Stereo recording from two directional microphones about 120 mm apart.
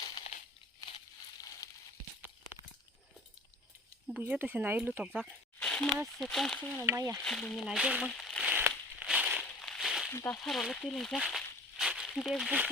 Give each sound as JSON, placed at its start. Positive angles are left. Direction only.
{"t": 1.4, "sound": "a sound", "side_deg": 30}
{"t": 4.1, "sound": "speech", "side_deg": -15}
{"t": 5.5, "sound": "a sound", "side_deg": 10}
{"t": 6.1, "sound": "speech", "side_deg": 0}
{"t": 6.8, "sound": "speech", "side_deg": -25}
{"t": 7.3, "sound": "speech", "side_deg": 5}
{"t": 8.0, "sound": "a sound", "side_deg": 5}
{"t": 9.0, "sound": "crushing", "side_deg": -10}
{"t": 9.4, "sound": "crushing", "side_deg": 5}
{"t": 10.1, "sound": "speech", "side_deg": 20}
{"t": 10.3, "sound": "a sound", "side_deg": 5}
{"t": 12.1, "sound": "speech", "side_deg": 0}